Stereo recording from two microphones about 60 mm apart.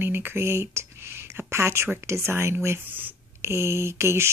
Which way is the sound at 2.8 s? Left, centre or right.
Right.